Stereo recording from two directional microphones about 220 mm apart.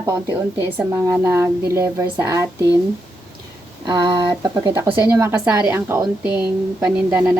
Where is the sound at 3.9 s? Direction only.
20° right (ahead or behind).